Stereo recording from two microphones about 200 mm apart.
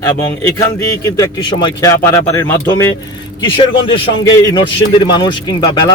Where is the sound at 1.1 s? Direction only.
15° left (ahead or behind).